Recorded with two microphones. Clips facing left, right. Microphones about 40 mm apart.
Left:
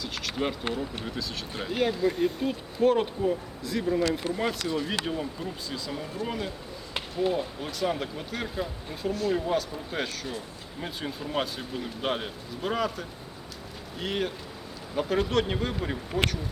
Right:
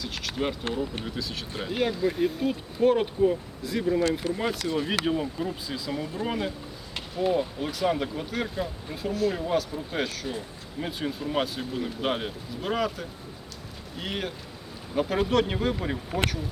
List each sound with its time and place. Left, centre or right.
0.0 s speech: centre
4.7 s speech: centre